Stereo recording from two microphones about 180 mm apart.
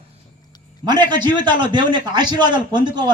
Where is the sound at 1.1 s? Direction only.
25° right (ahead or behind).